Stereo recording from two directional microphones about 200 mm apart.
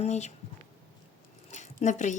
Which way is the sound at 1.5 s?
35° left (ahead or behind).